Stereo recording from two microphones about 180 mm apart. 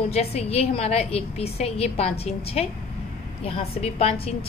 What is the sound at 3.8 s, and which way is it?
Speech, 35° left (ahead or behind).